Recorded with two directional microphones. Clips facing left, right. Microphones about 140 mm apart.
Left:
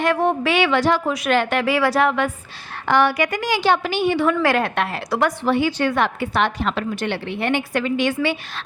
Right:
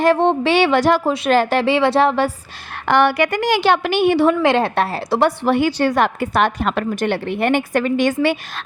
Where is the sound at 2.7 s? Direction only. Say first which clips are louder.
Right 2 dB; 60° right (ahead or behind).